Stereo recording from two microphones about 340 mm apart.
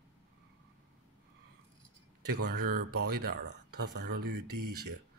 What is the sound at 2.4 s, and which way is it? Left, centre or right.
Speech, right.